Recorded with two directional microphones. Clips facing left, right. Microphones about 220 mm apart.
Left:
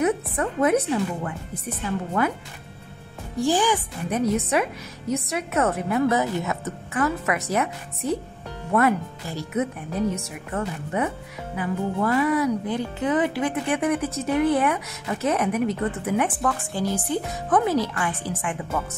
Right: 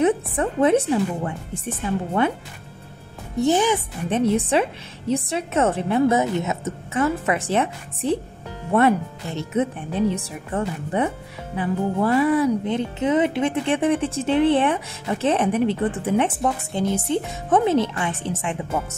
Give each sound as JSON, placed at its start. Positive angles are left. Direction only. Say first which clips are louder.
{"t": 0.0, "sound": "speech", "louder": "right 3 dB", "side_deg": -30}
{"t": 3.3, "sound": "speech", "louder": "right 3 dB", "side_deg": -20}